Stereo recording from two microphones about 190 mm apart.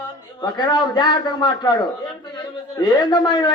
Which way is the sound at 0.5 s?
20° left (ahead or behind).